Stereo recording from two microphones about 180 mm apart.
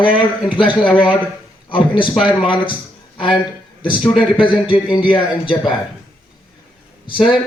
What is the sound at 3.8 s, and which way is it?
A man's voice, 25° left (ahead or behind).